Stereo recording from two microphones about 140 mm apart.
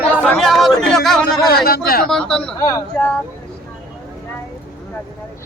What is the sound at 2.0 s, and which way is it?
Speech, 5° left (ahead or behind).